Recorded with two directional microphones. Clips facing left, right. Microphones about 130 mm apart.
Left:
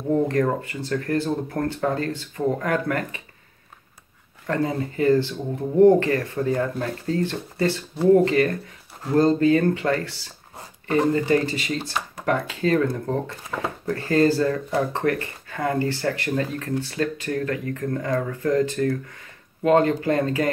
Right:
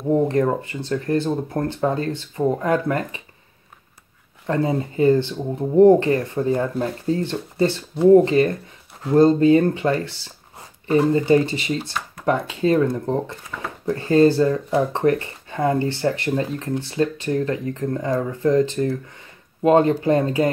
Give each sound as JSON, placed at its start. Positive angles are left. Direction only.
{"t": 0.1, "sound": "speech", "side_deg": -20}
{"t": 4.5, "sound": "speech", "side_deg": -25}